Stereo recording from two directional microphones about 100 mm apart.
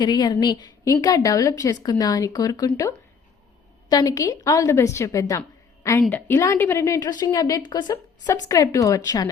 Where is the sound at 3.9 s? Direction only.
35° left (ahead or behind).